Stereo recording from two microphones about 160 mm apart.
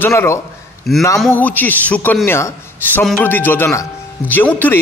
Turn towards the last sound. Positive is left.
turn(degrees=10)  # may be behind; listen again after turning